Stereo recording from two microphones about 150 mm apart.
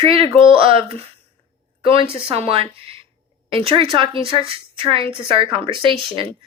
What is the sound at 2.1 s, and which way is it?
A woman's voice, 40° right (ahead or behind).